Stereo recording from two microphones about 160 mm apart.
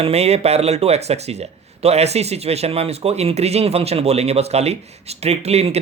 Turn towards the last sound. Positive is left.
turn(degrees=-40)  # may be behind; listen again after turning